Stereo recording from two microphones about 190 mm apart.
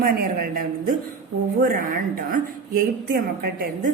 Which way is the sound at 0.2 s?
50° right (ahead or behind).